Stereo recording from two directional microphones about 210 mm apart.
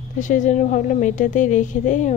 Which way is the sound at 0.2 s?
35° left (ahead or behind).